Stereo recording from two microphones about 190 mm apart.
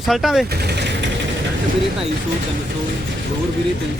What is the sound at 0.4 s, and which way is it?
Vehicle, 55° right (ahead or behind).